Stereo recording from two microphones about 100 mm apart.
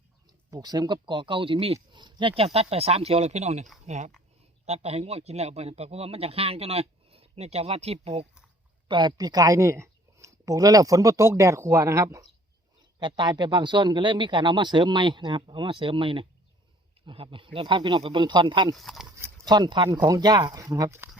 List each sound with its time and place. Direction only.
0.5 s speech: 45° right (ahead or behind); by 1.8 s 75° right (ahead or behind)
1.9 s speech: 50° right (ahead or behind); by 3.6 s 90° right
4.6 s speech: 90° right
8.9 s speech: 50° right (ahead or behind); by 12.2 s 30° right (ahead or behind)
13.0 s a man's voice: 50° right (ahead or behind)
18.7 s speech: centre (ahead or behind)
19.5 s a man's voice: 45° right (ahead or behind)